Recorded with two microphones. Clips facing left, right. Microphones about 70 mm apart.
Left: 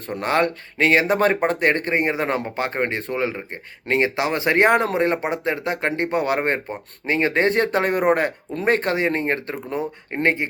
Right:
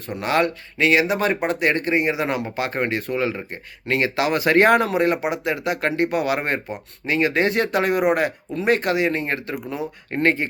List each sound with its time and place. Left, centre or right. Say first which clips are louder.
0.2 s speech: even; left
10.1 s speech: right 2 dB; left